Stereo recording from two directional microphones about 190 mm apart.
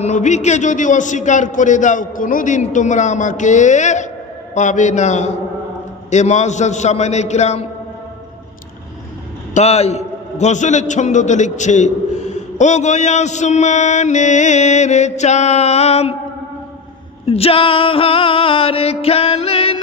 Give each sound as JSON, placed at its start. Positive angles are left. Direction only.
{"t": 0.0, "sound": "a man's voice", "side_deg": 40}
{"t": 9.5, "sound": "a man's voice", "side_deg": 35}
{"t": 17.3, "sound": "music", "side_deg": 30}